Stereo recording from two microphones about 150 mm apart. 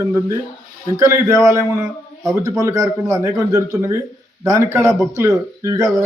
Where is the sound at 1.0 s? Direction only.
20° right (ahead or behind).